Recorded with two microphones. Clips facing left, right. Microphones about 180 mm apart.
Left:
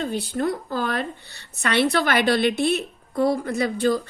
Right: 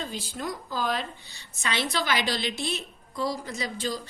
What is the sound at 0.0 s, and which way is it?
A woman's voice, 65° left (ahead or behind).